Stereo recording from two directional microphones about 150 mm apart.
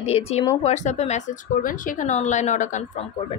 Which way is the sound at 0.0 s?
40° left (ahead or behind).